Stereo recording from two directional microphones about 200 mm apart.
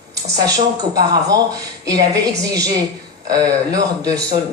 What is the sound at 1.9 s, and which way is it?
A woman's voice, 20° right (ahead or behind).